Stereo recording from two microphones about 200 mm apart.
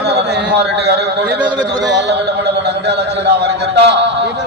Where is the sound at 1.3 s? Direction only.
5° right (ahead or behind).